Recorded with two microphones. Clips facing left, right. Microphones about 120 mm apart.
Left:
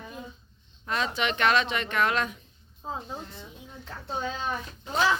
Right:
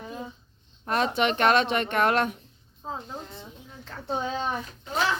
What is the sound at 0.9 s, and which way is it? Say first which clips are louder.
Speech: right 4 dB; 50° right (ahead or behind).